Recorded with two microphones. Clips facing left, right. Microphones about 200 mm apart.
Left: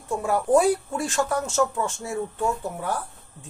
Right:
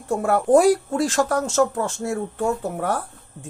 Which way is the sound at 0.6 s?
90° right.